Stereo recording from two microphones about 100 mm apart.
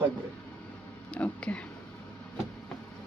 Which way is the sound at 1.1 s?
10° left (ahead or behind).